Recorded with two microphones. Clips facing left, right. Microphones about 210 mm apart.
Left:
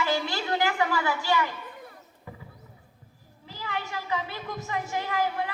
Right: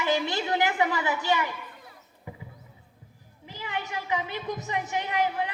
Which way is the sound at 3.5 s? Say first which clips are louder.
Even; 20° right (ahead or behind).